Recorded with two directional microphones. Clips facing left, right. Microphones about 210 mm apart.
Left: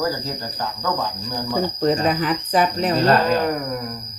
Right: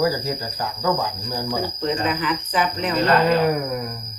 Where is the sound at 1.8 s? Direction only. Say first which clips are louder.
Left 5 dB; 40° left (ahead or behind).